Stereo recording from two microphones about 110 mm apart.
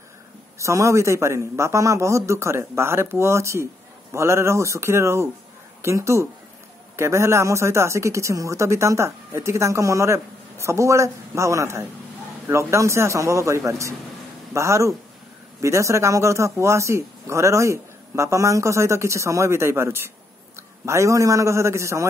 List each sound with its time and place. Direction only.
0.6 s a man's voice: 25° right (ahead or behind)